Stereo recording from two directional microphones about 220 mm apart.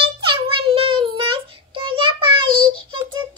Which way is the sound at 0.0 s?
25° right (ahead or behind).